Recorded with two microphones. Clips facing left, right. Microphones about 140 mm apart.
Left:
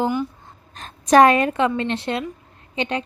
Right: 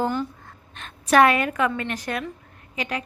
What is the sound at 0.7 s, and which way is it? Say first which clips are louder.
A woman's voice: left 4 dB; 35° left (ahead or behind).